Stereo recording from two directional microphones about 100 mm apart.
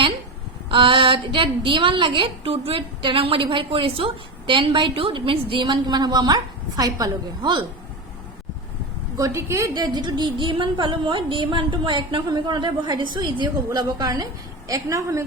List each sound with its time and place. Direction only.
0.7 s a woman's voice: 60° right (ahead or behind); by 7.6 s 40° right (ahead or behind)
9.1 s a woman's voice: 30° right (ahead or behind)
9.7 s a sound: 45° right (ahead or behind)
13.7 s a woman's voice: 40° right (ahead or behind)